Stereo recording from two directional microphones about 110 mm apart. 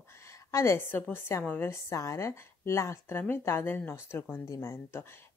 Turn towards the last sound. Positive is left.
turn(degrees=25)  # may be behind; listen again after turning